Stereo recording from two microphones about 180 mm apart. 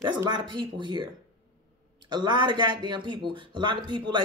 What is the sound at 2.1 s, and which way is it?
Speech, 25° right (ahead or behind).